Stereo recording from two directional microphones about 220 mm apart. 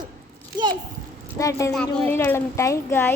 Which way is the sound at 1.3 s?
15° left (ahead or behind).